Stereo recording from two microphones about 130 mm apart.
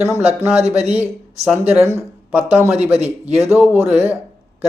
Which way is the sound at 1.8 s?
15° right (ahead or behind).